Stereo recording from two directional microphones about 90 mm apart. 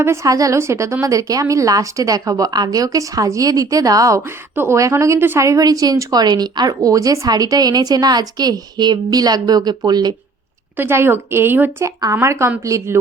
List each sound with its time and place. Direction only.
0.0 s a woman's voice: 30° right (ahead or behind)
4.5 s speech: 30° right (ahead or behind); by 10.2 s 50° right (ahead or behind)
10.8 s a woman's voice: 25° right (ahead or behind)